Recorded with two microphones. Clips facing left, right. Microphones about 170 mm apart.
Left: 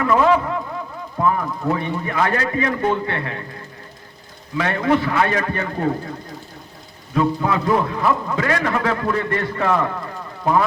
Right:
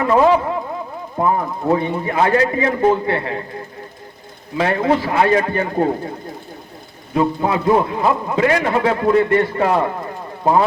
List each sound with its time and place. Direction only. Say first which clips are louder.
0.0 s a man's voice: right 3 dB; 30° right (ahead or behind)
4.5 s a man's voice: right 2 dB; 30° right (ahead or behind)
7.1 s a man's voice: right 2 dB; 25° right (ahead or behind)